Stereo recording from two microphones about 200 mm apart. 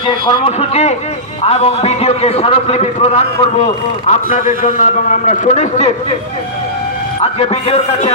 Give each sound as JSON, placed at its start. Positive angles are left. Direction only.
{"t": 0.1, "sound": "a man's voice", "side_deg": 20}
{"t": 7.3, "sound": "a man's voice", "side_deg": 30}